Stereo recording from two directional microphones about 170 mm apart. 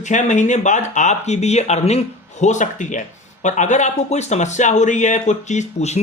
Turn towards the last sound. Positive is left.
turn(degrees=40)  # may be behind; listen again after turning